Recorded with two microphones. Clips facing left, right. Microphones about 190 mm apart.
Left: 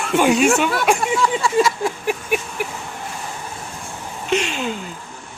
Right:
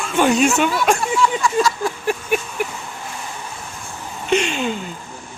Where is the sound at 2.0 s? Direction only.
5° left (ahead or behind).